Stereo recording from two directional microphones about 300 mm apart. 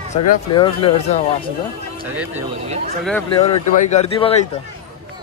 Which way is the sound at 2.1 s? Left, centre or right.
Centre.